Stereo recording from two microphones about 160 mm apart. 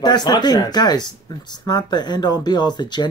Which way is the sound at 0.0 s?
25° left (ahead or behind).